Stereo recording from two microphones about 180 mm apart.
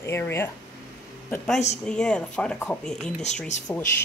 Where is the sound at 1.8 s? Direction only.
5° left (ahead or behind).